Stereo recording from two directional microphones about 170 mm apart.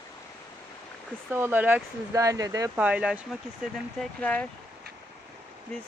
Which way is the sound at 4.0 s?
10° left (ahead or behind).